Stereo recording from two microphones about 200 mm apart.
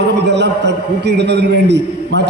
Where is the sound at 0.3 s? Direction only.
60° right (ahead or behind).